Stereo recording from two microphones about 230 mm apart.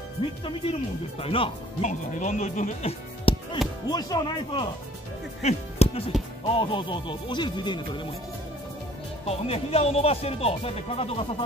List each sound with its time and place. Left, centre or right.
0.2 s speech: left
5.4 s music: left
6.6 s speech: left
9.2 s speech: left